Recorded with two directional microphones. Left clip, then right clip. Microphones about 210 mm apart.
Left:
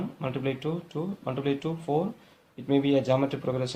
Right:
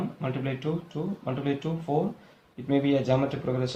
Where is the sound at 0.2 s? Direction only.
50° left (ahead or behind).